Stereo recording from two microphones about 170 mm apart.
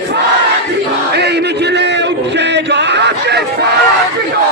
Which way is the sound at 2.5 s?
90° right.